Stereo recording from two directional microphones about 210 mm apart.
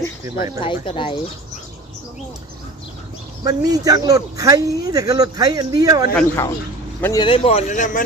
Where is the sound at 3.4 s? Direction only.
15° right (ahead or behind).